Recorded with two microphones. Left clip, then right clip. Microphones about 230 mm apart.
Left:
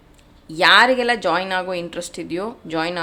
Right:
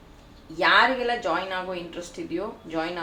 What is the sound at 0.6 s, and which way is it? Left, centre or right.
Speech, left.